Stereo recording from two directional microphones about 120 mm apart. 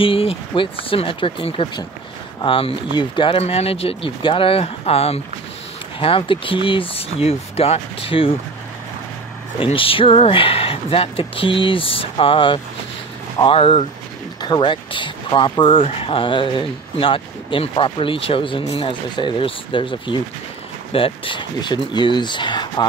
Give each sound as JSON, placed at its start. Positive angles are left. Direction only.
{"t": 0.0, "sound": "speech", "side_deg": 50}
{"t": 9.6, "sound": "speech", "side_deg": 50}